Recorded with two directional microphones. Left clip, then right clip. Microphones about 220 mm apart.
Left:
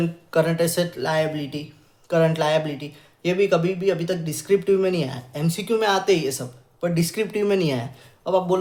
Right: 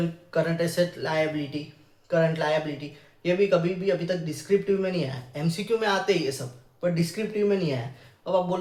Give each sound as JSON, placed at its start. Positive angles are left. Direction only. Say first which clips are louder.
{"t": 0.3, "sound": "speech", "louder": "left 6 dB", "side_deg": 35}